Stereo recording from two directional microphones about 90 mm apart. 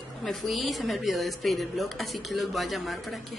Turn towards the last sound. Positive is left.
turn(degrees=0)  # may be behind; listen again after turning